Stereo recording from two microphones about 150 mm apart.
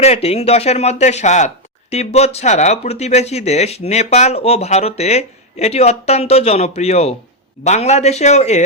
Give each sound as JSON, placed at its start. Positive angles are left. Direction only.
{"t": 0.0, "sound": "speech", "side_deg": 45}